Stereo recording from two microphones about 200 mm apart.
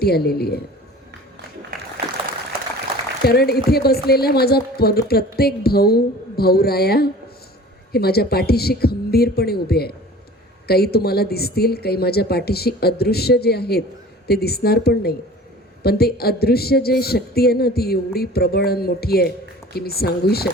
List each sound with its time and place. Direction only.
0.0 s speech: 50° left (ahead or behind)
3.2 s speech: 50° left (ahead or behind)